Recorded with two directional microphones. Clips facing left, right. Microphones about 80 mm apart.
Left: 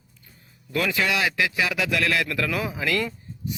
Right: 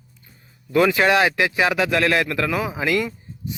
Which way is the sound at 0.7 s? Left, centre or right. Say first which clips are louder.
Right 8 dB; right.